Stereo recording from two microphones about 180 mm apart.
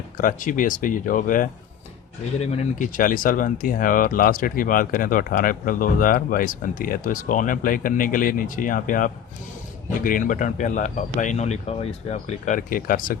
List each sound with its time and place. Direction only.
0.2 s speech: 50° left (ahead or behind)
2.4 s speech: 35° left (ahead or behind)